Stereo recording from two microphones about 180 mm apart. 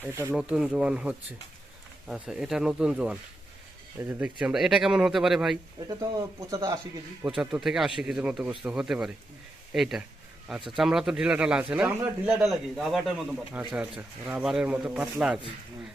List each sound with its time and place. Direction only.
0.0 s a man's voice: 15° right (ahead or behind)
5.9 s speech: 20° right (ahead or behind)
7.2 s a man's voice: 5° right (ahead or behind)